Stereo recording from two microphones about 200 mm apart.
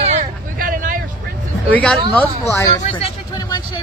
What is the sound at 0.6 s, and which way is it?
Vehicle, 45° right (ahead or behind).